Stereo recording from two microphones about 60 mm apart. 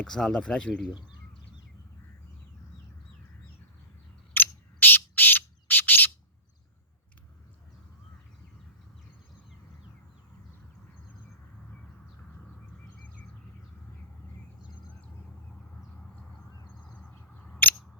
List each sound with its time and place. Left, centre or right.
0.0 s speech: centre
4.4 s bird: left
17.6 s scissors: left